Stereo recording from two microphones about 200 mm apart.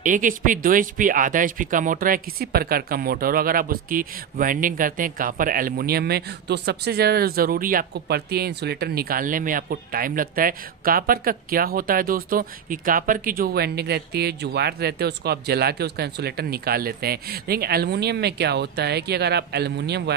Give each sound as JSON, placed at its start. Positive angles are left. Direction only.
{"t": 0.0, "sound": "speech", "side_deg": -40}